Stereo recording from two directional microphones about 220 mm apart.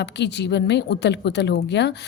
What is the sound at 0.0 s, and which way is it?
Speech, 50° left (ahead or behind).